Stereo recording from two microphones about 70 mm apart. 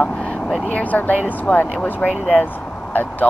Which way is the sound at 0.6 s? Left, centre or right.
Left.